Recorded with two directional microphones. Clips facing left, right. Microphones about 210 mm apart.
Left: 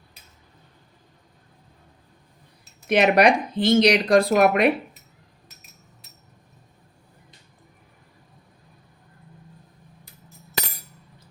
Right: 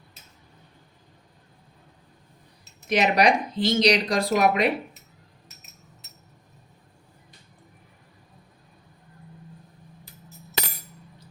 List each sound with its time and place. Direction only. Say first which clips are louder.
2.9 s speech: left 4 dB; 55° left (ahead or behind)